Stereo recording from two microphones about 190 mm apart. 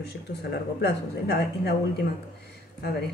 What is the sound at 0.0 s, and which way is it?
Speech, 60° left (ahead or behind).